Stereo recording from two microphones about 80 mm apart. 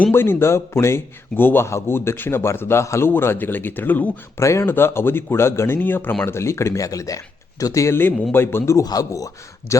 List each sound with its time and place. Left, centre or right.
0.1 s a man's voice: left
4.4 s a man's voice: left
8.3 s a man's voice: left